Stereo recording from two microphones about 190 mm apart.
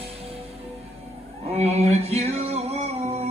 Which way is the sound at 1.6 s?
35° right (ahead or behind).